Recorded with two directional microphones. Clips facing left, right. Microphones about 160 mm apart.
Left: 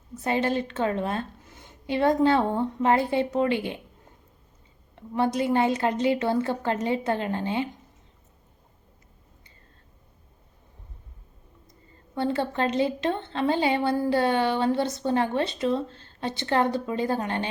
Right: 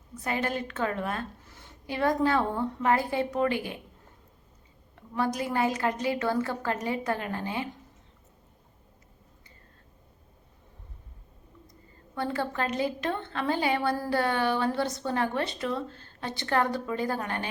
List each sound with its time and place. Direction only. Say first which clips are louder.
0.1 s a woman's voice: left 5 dB; 25° left (ahead or behind)
4.9 s a woman's voice: left 5 dB; 25° left (ahead or behind)
12.1 s a woman's voice: left 4 dB; 25° left (ahead or behind)